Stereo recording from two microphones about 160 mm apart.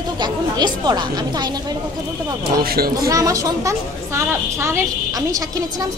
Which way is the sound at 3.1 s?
20° right (ahead or behind).